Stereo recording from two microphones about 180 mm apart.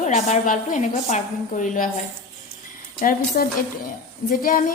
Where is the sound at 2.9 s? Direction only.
50° left (ahead or behind).